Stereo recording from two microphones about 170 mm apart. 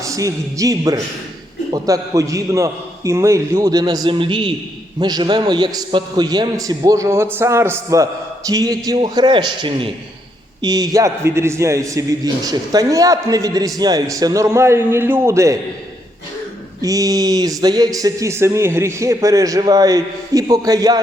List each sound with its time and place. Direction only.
0.0 s a man's voice: 20° right (ahead or behind)
16.8 s a man's voice: 20° right (ahead or behind)